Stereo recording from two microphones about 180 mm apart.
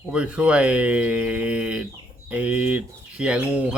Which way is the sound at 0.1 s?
5° right (ahead or behind).